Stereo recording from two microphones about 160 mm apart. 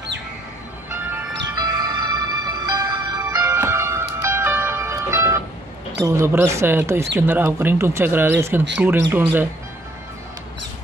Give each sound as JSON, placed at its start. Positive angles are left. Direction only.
{"t": 1.5, "sound": "music", "side_deg": -25}
{"t": 5.9, "sound": "speech", "side_deg": -15}